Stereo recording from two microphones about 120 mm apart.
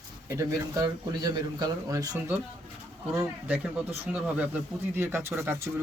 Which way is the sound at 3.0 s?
15° right (ahead or behind).